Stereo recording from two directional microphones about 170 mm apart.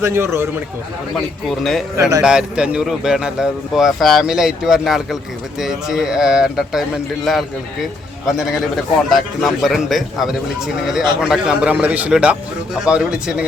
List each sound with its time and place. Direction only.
0.0 s a man's voice: 15° right (ahead or behind)
1.1 s speech: centre (ahead or behind)
2.0 s speech: 20° right (ahead or behind)
2.2 s a man's voice: 5° right (ahead or behind)